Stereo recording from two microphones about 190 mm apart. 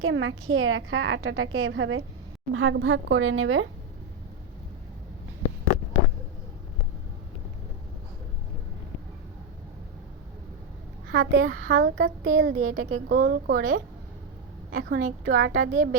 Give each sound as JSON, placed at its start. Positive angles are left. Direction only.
{"t": 0.0, "sound": "a woman's voice", "side_deg": -90}
{"t": 11.1, "sound": "a woman's voice", "side_deg": -60}